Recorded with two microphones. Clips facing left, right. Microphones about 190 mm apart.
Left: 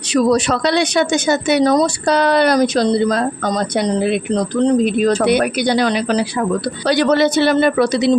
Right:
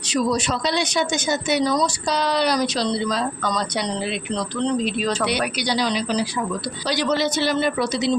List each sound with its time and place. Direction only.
0.1 s speech: 65° left (ahead or behind)